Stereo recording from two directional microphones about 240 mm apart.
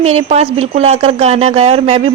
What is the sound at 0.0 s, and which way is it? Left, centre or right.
A woman's voice, right.